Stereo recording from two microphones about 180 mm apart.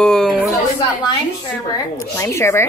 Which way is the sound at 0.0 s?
5° left (ahead or behind).